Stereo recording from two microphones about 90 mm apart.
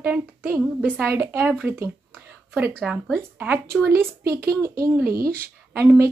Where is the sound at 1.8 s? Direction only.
30° right (ahead or behind).